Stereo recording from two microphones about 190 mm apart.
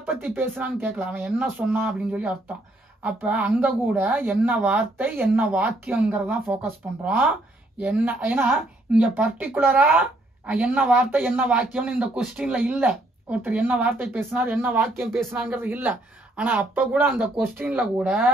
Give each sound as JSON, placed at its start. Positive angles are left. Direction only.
{"t": 0.0, "sound": "speech", "side_deg": -10}